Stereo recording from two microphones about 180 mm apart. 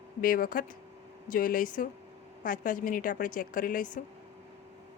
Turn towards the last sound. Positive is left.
turn(degrees=45)  # may be behind; listen again after turning